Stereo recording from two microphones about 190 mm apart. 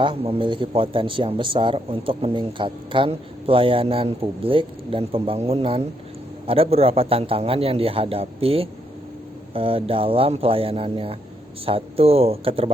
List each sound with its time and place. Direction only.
0.0 s a man's voice: 30° right (ahead or behind)